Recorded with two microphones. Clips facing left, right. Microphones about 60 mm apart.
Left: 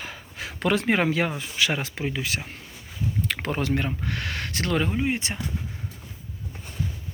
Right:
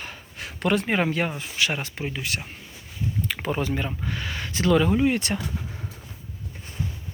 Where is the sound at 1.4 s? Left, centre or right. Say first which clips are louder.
Left 1 dB; left.